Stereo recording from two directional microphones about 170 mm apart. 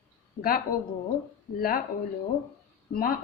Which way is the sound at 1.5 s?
60° left (ahead or behind).